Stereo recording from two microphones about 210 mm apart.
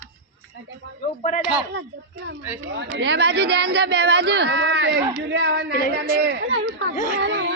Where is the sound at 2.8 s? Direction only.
55° right (ahead or behind).